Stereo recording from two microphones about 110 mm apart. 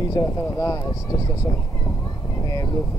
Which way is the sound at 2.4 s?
35° left (ahead or behind).